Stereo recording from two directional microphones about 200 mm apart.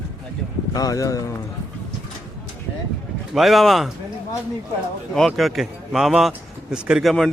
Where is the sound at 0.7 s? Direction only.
15° left (ahead or behind).